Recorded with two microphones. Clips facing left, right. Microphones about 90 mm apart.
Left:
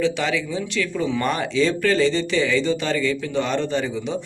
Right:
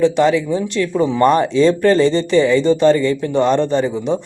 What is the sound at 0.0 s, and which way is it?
A man's voice, 45° right (ahead or behind).